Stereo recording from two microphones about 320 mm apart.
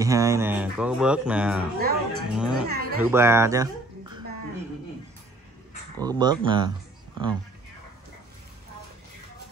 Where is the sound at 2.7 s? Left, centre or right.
Right.